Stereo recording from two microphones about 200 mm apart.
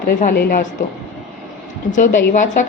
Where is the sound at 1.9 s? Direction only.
40° left (ahead or behind).